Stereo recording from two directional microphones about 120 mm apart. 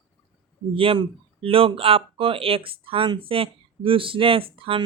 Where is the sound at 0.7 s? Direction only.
50° right (ahead or behind).